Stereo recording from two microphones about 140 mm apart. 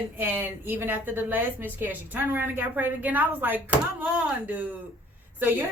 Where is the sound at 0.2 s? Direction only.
15° right (ahead or behind).